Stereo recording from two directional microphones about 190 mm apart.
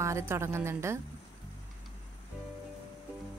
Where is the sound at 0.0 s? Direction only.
15° right (ahead or behind).